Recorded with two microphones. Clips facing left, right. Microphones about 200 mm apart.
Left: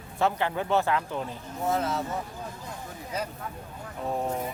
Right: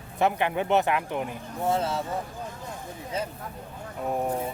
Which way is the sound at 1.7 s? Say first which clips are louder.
Right 1 dB; 30° right (ahead or behind).